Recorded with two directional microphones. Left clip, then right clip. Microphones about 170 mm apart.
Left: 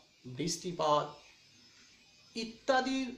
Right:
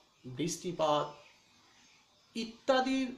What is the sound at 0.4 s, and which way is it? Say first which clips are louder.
Speech: right 1 dB; 60° right (ahead or behind).